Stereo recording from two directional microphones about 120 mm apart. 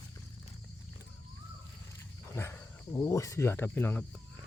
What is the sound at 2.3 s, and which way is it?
Speech, 20° left (ahead or behind).